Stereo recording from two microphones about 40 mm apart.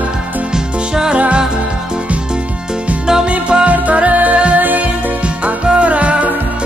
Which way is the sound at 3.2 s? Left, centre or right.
Right.